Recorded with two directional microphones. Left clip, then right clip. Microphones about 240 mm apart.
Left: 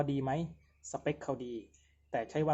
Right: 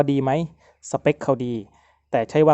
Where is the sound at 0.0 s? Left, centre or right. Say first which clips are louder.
Right 14 dB; right.